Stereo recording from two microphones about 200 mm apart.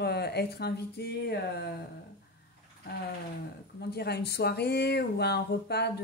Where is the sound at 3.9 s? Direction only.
55° left (ahead or behind).